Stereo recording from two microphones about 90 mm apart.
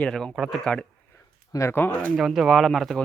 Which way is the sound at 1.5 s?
30° left (ahead or behind).